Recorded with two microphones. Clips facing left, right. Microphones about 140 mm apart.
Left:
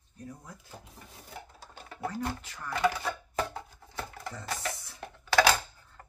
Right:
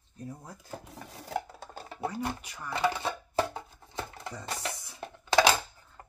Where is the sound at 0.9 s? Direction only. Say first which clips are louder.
Right 14 dB; 90° right.